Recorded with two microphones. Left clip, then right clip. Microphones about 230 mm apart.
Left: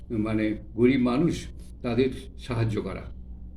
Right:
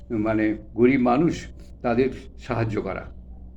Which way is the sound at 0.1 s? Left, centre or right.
Centre.